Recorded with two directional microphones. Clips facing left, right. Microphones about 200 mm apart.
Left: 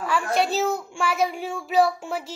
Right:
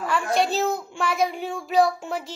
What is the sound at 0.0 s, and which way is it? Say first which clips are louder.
A woman's voice: even; centre (ahead or behind).